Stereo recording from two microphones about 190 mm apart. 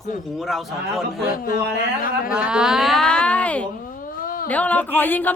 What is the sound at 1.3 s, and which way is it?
Speech, 50° left (ahead or behind).